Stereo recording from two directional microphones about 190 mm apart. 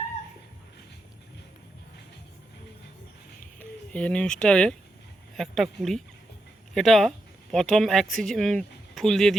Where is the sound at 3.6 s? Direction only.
5° left (ahead or behind).